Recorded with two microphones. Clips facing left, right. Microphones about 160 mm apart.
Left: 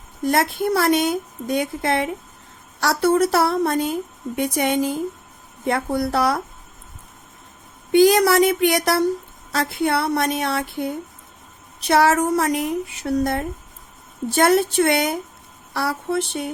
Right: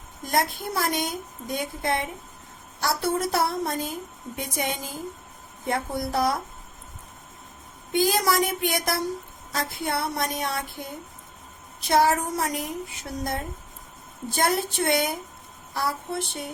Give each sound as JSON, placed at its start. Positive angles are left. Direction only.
{"t": 0.3, "sound": "a woman's voice", "side_deg": 70}
{"t": 7.9, "sound": "a woman's voice", "side_deg": 70}